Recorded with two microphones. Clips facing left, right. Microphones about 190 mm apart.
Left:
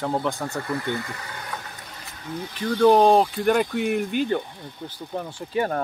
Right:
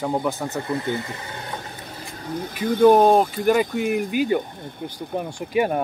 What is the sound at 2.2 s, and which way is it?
Speech, 40° right (ahead or behind).